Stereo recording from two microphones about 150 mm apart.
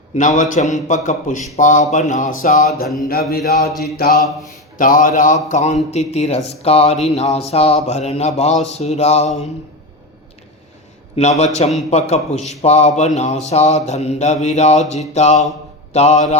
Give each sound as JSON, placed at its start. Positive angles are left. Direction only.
{"t": 0.2, "sound": "a man's voice", "side_deg": 60}
{"t": 3.1, "sound": "mantra", "side_deg": 90}
{"t": 4.8, "sound": "a man's voice", "side_deg": 65}
{"t": 11.2, "sound": "speech", "side_deg": 50}